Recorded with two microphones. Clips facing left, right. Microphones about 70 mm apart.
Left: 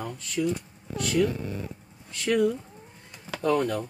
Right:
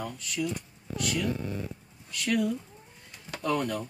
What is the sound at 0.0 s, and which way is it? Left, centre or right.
Speech, left.